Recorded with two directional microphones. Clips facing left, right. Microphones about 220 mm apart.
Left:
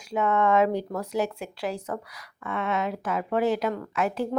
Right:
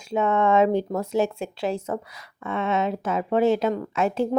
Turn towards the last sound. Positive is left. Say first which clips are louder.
# right 4 dB
turn(degrees=-25)  # may be behind; listen again after turning